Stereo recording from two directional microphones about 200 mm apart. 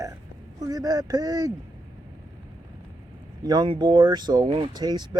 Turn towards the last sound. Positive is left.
turn(degrees=-20)  # may be behind; listen again after turning